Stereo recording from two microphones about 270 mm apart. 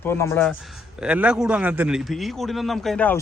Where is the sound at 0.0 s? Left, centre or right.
Centre.